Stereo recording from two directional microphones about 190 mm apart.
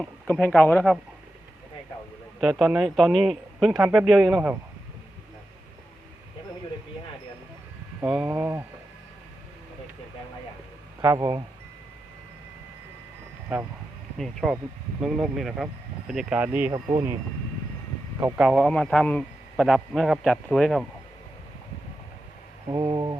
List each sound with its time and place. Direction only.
0.0 s speech: 5° left (ahead or behind)
2.4 s a man's voice: centre (ahead or behind)
8.0 s a man's voice: 5° right (ahead or behind)
8.3 s speech: 15° right (ahead or behind)
11.0 s speech: 20° right (ahead or behind)
14.4 s a man's voice: centre (ahead or behind)
18.2 s speech: 15° right (ahead or behind)
18.4 s a man's voice: centre (ahead or behind)
22.7 s speech: 20° right (ahead or behind)